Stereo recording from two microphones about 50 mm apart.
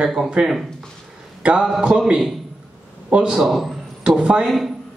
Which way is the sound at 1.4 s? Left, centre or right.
Right.